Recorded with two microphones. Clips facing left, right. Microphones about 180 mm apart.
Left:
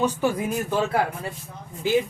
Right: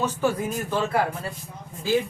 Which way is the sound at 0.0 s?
15° left (ahead or behind).